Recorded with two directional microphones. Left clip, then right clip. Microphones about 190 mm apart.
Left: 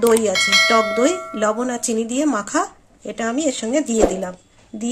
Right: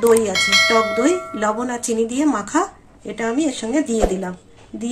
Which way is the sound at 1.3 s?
60° left (ahead or behind).